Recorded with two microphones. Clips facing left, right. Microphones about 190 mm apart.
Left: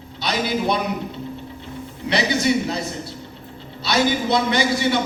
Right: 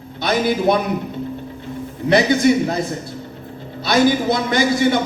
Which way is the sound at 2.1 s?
50° right (ahead or behind).